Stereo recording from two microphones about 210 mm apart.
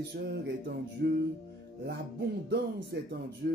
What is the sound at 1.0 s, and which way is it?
Music, 50° right (ahead or behind).